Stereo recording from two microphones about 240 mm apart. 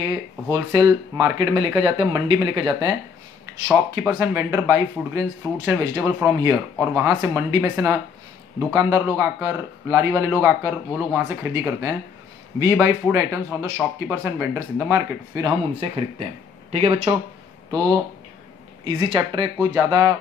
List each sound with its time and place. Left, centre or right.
0.1 s speech: centre
3.6 s speech: centre